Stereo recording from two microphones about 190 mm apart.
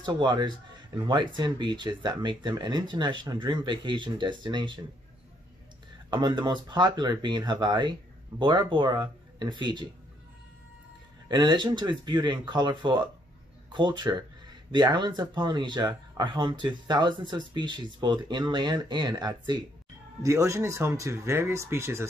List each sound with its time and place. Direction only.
0.0 s speech: 25° right (ahead or behind)
6.0 s speech: 25° right (ahead or behind)
11.2 s speech: 25° right (ahead or behind)